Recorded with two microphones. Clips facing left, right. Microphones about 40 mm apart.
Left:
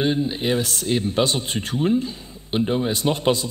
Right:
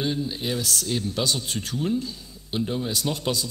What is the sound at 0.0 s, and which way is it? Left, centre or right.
Speech, left.